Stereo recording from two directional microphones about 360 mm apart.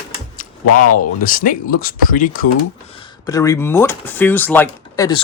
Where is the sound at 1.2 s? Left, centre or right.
Left.